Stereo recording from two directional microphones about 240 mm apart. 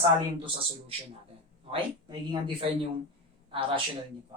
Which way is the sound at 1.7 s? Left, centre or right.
Right.